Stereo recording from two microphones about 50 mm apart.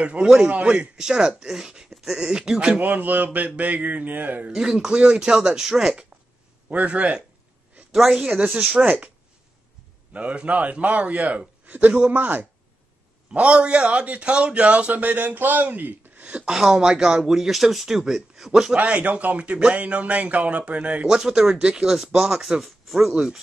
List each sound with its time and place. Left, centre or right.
0.0 s a man's voice: right
0.9 s speech: centre
2.7 s speech: right
4.5 s speech: centre
6.7 s a man's voice: right
7.9 s speech: centre
10.1 s a man's voice: right
13.3 s a man's voice: right
16.2 s a sound: right
16.4 s speech: centre
18.8 s a man's voice: right
21.1 s speech: centre